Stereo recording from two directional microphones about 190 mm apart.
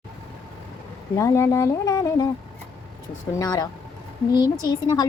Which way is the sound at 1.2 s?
15° left (ahead or behind).